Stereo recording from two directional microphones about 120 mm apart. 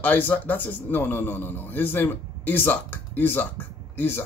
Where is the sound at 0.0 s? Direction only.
15° left (ahead or behind).